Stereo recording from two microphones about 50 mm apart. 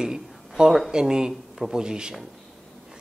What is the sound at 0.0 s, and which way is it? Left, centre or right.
Speech, centre.